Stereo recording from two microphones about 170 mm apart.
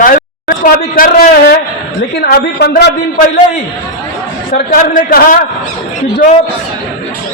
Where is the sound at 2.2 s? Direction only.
70° left (ahead or behind).